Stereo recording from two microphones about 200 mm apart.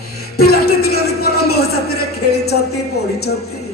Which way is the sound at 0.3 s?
50° left (ahead or behind).